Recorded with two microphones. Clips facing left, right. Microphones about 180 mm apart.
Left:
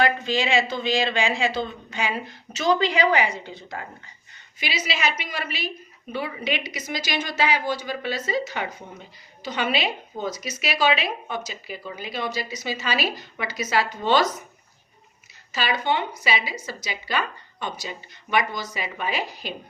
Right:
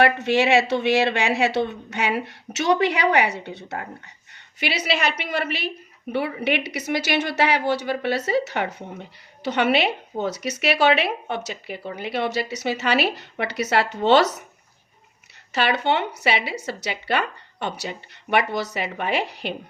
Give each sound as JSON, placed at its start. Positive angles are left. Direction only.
{"t": 0.0, "sound": "a woman's voice", "side_deg": -70}
{"t": 15.5, "sound": "a woman's voice", "side_deg": -65}